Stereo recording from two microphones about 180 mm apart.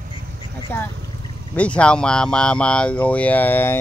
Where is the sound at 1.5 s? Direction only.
5° left (ahead or behind).